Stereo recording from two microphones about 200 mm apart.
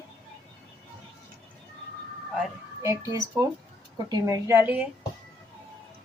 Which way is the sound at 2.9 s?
15° right (ahead or behind).